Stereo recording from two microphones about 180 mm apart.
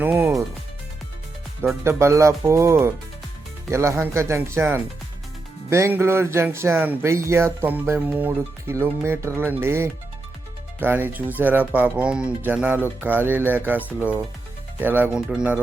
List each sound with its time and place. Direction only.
0.0 s speech: 15° right (ahead or behind)
1.6 s speech: 15° right (ahead or behind)